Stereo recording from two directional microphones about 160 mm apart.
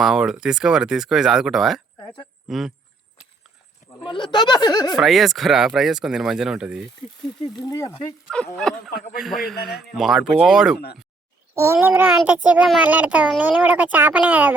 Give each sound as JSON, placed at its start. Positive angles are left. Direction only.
{"t": 0.0, "sound": "speech", "side_deg": 0}
{"t": 2.0, "sound": "speech", "side_deg": 30}
{"t": 2.5, "sound": "speech", "side_deg": 0}
{"t": 4.0, "sound": "speech", "side_deg": 30}
{"t": 4.9, "sound": "speech", "side_deg": 0}
{"t": 7.4, "sound": "speech", "side_deg": 25}
{"t": 9.1, "sound": "speech", "side_deg": 0}
{"t": 11.5, "sound": "a child's voice", "side_deg": -15}